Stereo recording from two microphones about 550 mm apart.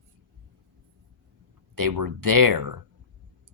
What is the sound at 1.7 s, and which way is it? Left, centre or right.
Speech, right.